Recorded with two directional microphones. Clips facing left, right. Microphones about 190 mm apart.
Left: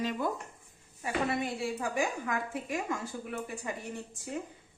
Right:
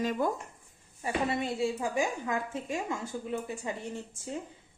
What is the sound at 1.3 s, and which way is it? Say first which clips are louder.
Speech: right 2 dB; 25° right (ahead or behind).